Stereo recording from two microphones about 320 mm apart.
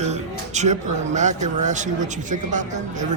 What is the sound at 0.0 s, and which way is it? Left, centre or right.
Speech, right.